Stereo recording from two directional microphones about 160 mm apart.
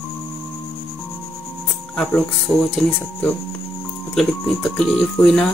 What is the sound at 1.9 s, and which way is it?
Speech, 5° left (ahead or behind).